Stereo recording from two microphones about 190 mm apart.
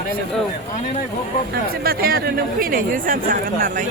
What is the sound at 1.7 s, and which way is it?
Speech, 50° right (ahead or behind).